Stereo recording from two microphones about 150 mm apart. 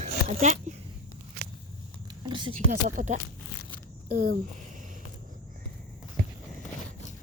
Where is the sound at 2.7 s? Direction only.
65° right (ahead or behind).